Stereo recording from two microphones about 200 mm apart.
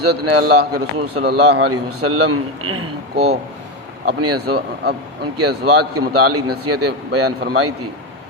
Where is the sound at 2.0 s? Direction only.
90° right.